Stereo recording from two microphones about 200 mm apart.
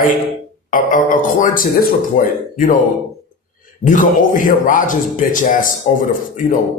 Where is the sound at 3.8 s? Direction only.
40° left (ahead or behind).